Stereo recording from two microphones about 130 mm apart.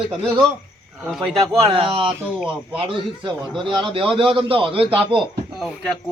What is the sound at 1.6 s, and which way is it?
Speech, 45° right (ahead or behind).